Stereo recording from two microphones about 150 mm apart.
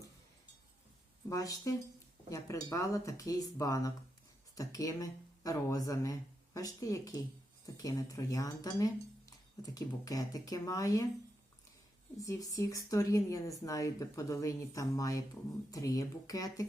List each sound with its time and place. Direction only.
1.3 s speech: 25° left (ahead or behind)
12.2 s speech: 20° left (ahead or behind)